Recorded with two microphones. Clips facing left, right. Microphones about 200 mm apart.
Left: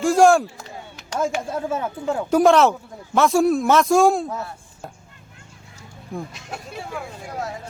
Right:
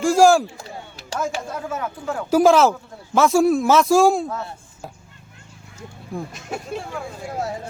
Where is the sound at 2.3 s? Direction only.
Centre (ahead or behind).